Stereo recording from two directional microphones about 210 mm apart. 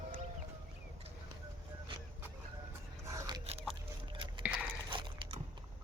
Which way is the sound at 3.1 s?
15° right (ahead or behind).